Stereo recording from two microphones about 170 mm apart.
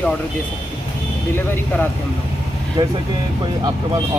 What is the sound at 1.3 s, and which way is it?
Speech, 15° left (ahead or behind).